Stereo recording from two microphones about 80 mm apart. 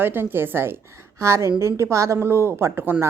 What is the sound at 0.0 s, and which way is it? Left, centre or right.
A woman's voice, right.